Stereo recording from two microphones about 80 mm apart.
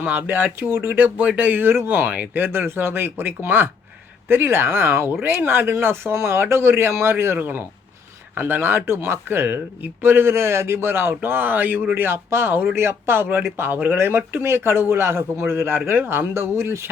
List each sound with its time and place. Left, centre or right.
0.0 s speech: right